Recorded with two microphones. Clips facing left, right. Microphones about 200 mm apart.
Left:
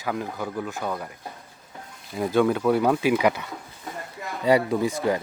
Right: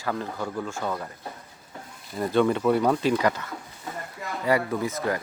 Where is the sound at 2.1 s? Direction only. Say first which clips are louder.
Left 1 dB; 5° left (ahead or behind).